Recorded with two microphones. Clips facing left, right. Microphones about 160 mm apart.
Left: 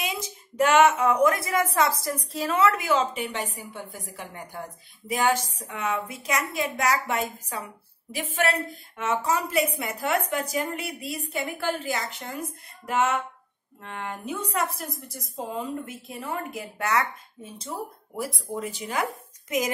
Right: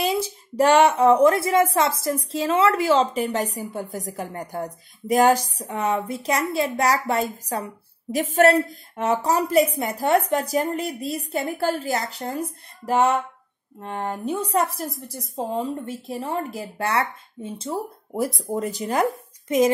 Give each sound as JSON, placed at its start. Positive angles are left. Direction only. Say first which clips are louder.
{"t": 0.0, "sound": "speech", "louder": "right 9 dB", "side_deg": -30}
{"t": 18.1, "sound": "speech", "louder": "right 7 dB", "side_deg": -40}